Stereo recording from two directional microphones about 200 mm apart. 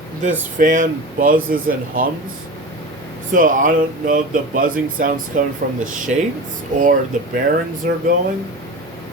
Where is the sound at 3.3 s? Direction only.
40° right (ahead or behind).